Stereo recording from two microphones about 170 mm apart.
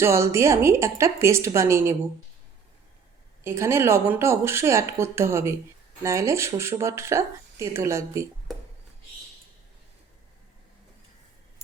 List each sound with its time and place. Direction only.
0.0 s speech: 15° right (ahead or behind)
3.4 s speech: 15° right (ahead or behind)